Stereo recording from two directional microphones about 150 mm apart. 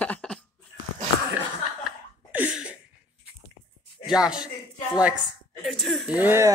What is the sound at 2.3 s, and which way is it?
Sneeze, 5° right (ahead or behind).